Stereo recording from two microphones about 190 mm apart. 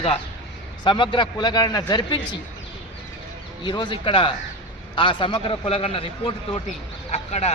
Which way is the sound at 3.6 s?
25° left (ahead or behind).